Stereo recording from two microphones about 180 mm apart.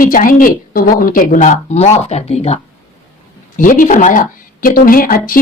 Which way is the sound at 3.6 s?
50° left (ahead or behind).